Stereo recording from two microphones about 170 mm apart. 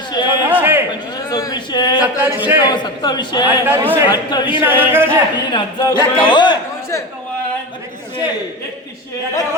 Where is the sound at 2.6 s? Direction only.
25° left (ahead or behind).